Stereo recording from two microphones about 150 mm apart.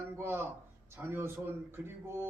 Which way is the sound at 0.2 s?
15° right (ahead or behind).